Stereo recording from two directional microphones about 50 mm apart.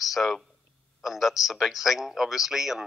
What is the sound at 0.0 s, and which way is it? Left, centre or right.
A man's voice, centre.